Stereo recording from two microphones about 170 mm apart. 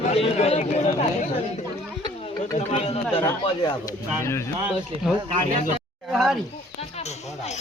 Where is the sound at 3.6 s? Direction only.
20° left (ahead or behind).